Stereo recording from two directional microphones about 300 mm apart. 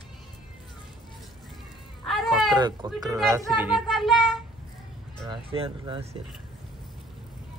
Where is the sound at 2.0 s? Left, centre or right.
Centre.